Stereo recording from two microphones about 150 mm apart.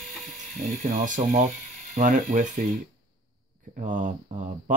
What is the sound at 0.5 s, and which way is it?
Speech, 60° right (ahead or behind).